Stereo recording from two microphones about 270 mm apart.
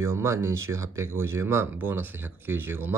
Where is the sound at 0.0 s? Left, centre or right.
Centre.